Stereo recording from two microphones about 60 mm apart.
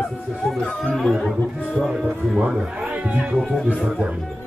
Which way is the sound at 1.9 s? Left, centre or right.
Right.